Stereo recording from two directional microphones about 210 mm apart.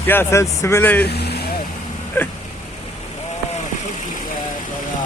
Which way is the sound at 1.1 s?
50° left (ahead or behind).